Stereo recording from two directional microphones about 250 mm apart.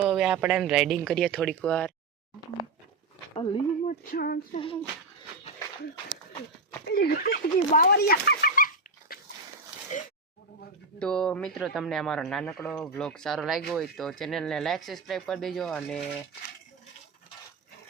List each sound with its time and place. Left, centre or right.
0.0 s a man's voice: centre
3.3 s speech: left
4.0 s a sound: left
4.5 s speech: left
6.8 s speech: left
11.0 s a man's voice: centre